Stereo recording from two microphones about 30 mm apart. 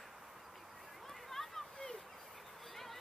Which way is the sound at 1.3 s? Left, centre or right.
Centre.